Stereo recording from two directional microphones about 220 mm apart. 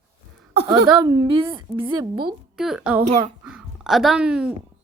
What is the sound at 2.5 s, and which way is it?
Speech, 5° right (ahead or behind).